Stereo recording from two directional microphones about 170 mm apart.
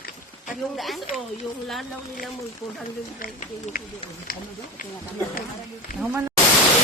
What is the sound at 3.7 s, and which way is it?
Speech, 60° left (ahead or behind).